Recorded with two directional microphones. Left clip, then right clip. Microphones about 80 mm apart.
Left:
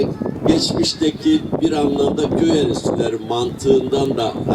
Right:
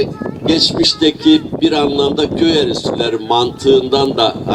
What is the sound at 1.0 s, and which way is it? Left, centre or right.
Speech, right.